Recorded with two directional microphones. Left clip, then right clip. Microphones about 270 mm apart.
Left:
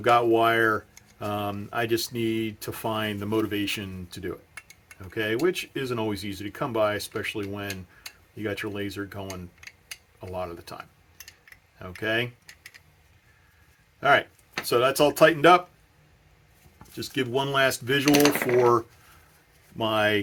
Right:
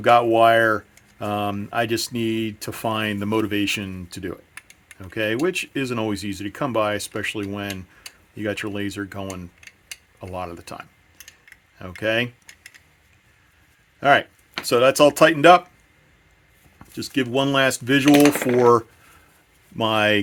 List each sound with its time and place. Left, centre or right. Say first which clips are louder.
0.0 s speech: right 5 dB; right
14.0 s speech: right 4 dB; right
16.7 s speech: right 5 dB; right
19.7 s speech: right 5 dB; right